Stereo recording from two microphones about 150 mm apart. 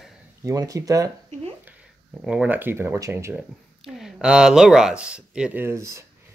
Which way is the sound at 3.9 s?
Centre (ahead or behind).